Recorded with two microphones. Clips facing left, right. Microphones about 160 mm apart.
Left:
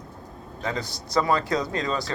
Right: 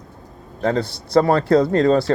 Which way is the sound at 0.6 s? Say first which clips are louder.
Right 10 dB; 60° right (ahead or behind).